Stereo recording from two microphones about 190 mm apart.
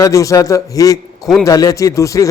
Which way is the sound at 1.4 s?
20° left (ahead or behind).